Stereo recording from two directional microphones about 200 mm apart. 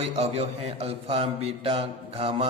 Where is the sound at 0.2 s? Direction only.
30° right (ahead or behind).